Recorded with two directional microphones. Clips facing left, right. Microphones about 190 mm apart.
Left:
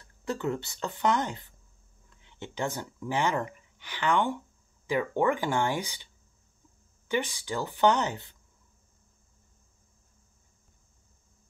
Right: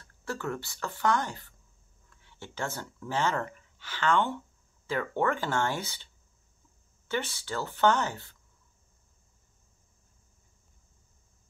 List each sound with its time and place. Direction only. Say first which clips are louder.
0.0 s speech: left 4 dB; 20° left (ahead or behind)
7.1 s speech: left 3 dB; 15° left (ahead or behind)